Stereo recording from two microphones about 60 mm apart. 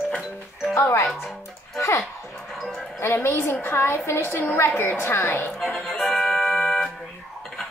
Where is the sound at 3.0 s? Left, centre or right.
Left.